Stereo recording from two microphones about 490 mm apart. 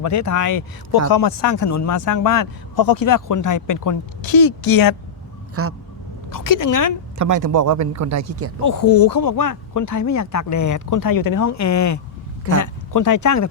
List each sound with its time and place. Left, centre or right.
0.0 s speech: left
5.6 s a sound: right
6.3 s speech: left
7.2 s speech: right
8.6 s speech: left